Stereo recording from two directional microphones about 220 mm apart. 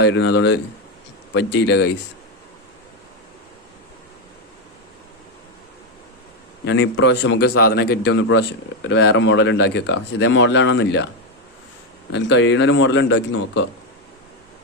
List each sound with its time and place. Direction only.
0.0 s a man's voice: 55° left (ahead or behind)
6.7 s a man's voice: 55° left (ahead or behind)
12.1 s a man's voice: 55° left (ahead or behind)